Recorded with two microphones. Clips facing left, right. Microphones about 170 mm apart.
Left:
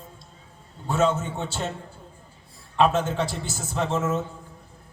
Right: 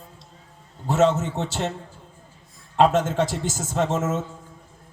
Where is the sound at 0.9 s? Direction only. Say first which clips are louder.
Right 3 dB; 75° right (ahead or behind).